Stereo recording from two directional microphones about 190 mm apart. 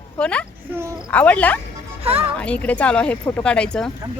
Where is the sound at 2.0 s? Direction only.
30° right (ahead or behind).